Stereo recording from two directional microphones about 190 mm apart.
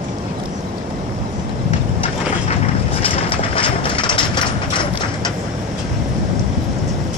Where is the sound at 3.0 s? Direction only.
30° left (ahead or behind).